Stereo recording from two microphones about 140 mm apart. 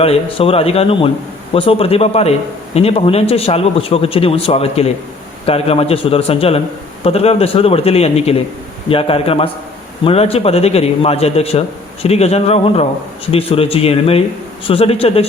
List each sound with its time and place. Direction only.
0.0 s a man's voice: 40° left (ahead or behind)